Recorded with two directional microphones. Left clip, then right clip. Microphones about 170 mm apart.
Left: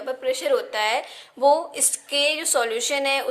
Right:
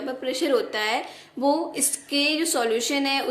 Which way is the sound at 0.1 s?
30° left (ahead or behind).